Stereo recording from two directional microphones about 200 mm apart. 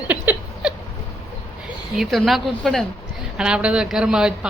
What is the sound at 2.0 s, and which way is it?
Speech, centre (ahead or behind).